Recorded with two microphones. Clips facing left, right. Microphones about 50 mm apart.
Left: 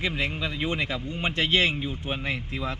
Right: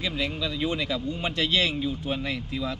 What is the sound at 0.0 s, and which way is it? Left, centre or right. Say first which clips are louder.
Speech: left 1 dB; left.